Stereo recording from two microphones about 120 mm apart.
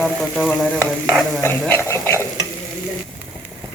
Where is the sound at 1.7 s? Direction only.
20° left (ahead or behind).